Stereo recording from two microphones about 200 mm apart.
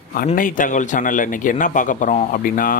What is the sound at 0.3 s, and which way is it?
A man's voice, 40° left (ahead or behind).